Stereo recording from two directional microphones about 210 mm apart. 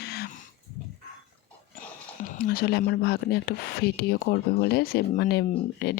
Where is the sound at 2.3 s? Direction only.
45° left (ahead or behind).